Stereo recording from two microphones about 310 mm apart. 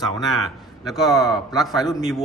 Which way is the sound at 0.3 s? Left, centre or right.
Centre.